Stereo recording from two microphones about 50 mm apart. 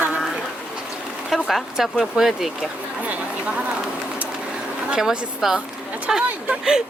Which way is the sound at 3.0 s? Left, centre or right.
Right.